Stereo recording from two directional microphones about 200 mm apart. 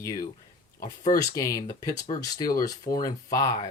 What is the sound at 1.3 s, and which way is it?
Speech, 15° left (ahead or behind).